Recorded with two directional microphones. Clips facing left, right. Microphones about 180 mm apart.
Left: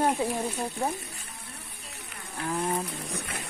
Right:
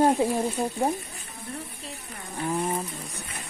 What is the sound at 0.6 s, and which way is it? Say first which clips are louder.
Speech: right 5 dB; 35° right (ahead or behind).